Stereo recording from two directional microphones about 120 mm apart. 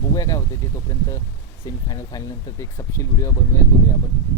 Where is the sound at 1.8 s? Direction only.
25° left (ahead or behind).